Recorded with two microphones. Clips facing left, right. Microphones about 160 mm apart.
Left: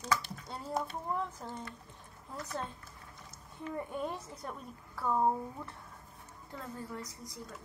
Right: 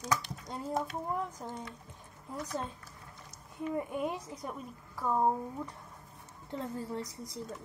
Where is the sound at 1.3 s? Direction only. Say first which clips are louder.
Right 2 dB; 15° right (ahead or behind).